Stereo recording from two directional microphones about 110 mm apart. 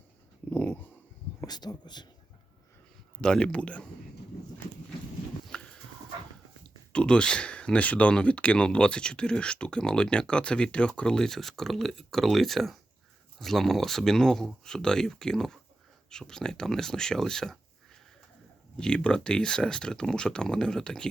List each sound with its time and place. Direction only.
0.5 s dog: 15° left (ahead or behind)
1.5 s speech: 40° left (ahead or behind)
3.2 s speech: 5° left (ahead or behind)
5.5 s dog: 5° left (ahead or behind)
6.9 s speech: 10° left (ahead or behind)
18.8 s speech: 10° left (ahead or behind)